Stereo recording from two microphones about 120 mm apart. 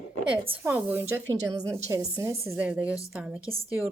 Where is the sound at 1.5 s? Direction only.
30° right (ahead or behind).